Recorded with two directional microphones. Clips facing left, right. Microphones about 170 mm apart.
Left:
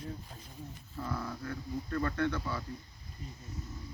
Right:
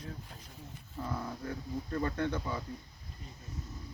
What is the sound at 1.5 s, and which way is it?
Speech, 20° right (ahead or behind).